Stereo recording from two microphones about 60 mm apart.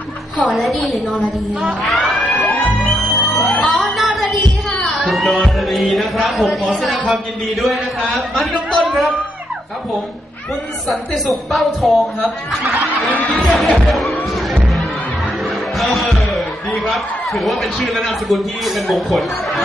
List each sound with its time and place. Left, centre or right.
0.4 s a woman's voice: centre
2.1 s music: left
3.3 s a sound: centre
4.7 s music: centre
5.6 s a woman's voice: centre
10.9 s a woman's voice: centre
12.7 s a sound: centre
13.3 s a woman's voice: centre
13.8 s music: centre
15.8 s a sound: centre
17.8 s a woman's voice: centre